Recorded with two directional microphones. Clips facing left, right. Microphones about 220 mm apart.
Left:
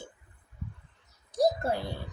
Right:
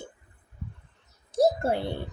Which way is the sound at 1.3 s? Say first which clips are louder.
Right 3 dB; 25° right (ahead or behind).